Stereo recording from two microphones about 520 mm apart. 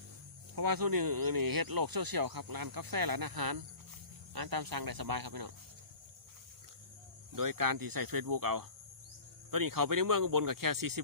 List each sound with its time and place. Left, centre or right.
0.5 s speech: right
7.3 s speech: right